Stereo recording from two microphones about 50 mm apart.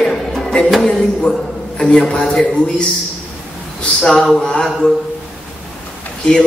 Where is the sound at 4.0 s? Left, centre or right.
Centre.